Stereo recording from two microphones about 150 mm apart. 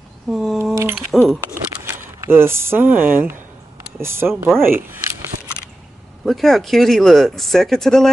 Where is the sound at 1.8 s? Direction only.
15° right (ahead or behind).